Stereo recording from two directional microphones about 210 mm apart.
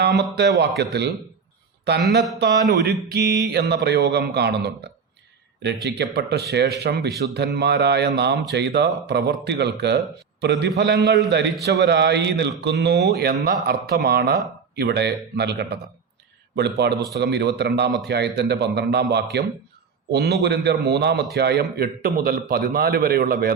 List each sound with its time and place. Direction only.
0.8 s a man's voice: 50° right (ahead or behind)